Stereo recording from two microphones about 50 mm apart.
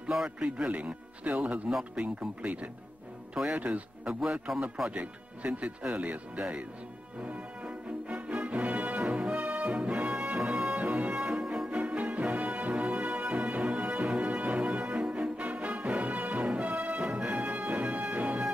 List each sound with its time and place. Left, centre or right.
0.4 s speech: right
7.2 s music: right
11.2 s music: centre
11.9 s music: right